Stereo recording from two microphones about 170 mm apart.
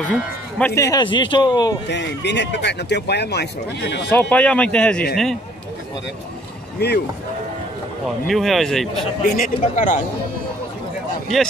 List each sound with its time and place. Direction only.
0.0 s speech: 10° left (ahead or behind)
0.7 s a man's voice: 20° left (ahead or behind)
1.9 s speech: 90° left
4.1 s speech: 10° left (ahead or behind)
6.8 s speech: 75° left (ahead or behind)
8.3 s speech: centre (ahead or behind)
9.2 s speech: 60° left (ahead or behind)